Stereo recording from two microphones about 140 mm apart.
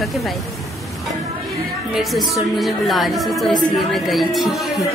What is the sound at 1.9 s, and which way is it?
A woman's voice, centre (ahead or behind).